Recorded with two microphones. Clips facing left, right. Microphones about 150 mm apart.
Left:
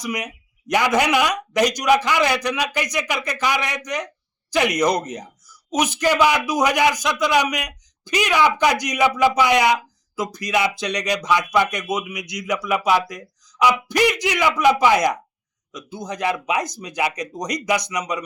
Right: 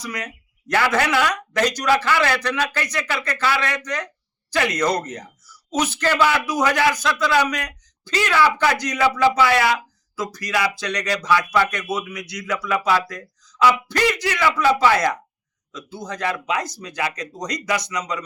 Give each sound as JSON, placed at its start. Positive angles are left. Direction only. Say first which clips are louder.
{"t": 0.0, "sound": "a man's voice", "louder": "left 3 dB", "side_deg": 15}